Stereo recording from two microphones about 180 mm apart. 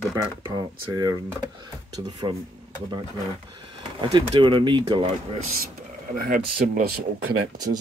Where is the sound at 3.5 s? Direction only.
25° right (ahead or behind).